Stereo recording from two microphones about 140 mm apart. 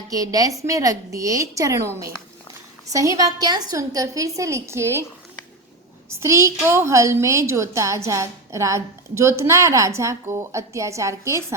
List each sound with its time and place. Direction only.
0.1 s a woman's voice: 25° right (ahead or behind)
2.8 s a woman's voice: 25° right (ahead or behind)
6.1 s a woman's voice: 20° right (ahead or behind)